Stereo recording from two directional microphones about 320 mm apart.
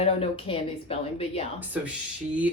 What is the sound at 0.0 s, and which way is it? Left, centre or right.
Speech, centre.